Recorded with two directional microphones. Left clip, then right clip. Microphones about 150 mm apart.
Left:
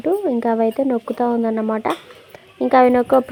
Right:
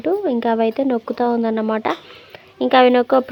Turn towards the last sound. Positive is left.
turn(degrees=15)  # may be behind; listen again after turning